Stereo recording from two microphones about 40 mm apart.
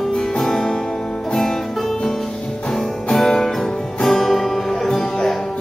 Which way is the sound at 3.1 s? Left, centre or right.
Centre.